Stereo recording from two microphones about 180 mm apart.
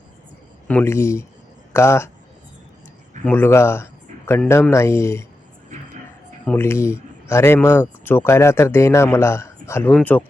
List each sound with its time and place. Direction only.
0.7 s speech: 10° left (ahead or behind)
3.2 s speech: 10° left (ahead or behind)
5.7 s vehicle: 40° right (ahead or behind)
6.4 s speech: 10° left (ahead or behind)